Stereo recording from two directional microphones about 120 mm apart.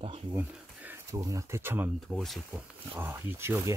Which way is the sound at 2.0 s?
Centre (ahead or behind).